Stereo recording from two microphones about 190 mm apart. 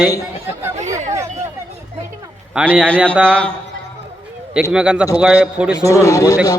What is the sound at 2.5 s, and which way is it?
Speech, 5° right (ahead or behind).